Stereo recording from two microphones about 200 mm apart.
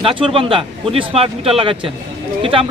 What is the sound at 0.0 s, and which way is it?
Speech, 25° right (ahead or behind).